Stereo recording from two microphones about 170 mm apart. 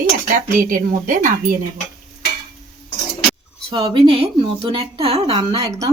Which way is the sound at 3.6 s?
30° right (ahead or behind).